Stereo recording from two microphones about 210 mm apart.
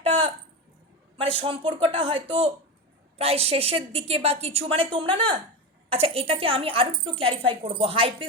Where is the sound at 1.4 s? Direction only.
25° right (ahead or behind).